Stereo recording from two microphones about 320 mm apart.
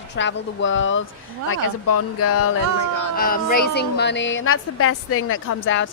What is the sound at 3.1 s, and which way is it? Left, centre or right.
Speech, left.